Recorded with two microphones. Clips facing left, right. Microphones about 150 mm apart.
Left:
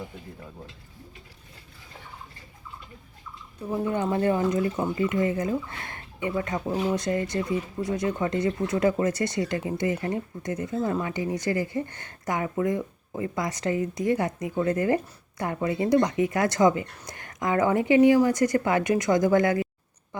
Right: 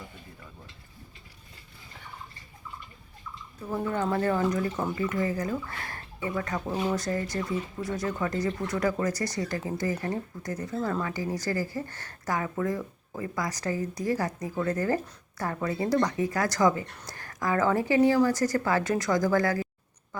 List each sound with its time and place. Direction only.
3.7 s speech: 15° left (ahead or behind)